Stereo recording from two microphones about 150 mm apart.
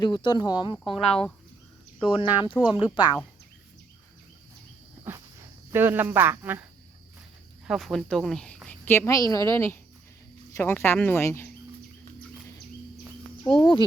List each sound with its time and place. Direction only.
0.0 s speech: 30° left (ahead or behind)
0.9 s speech: 5° left (ahead or behind)
2.1 s speech: 35° left (ahead or behind)
5.7 s speech: 15° right (ahead or behind)
7.7 s a woman's voice: centre (ahead or behind); by 11.4 s 15° left (ahead or behind)
13.5 s speech: 35° left (ahead or behind)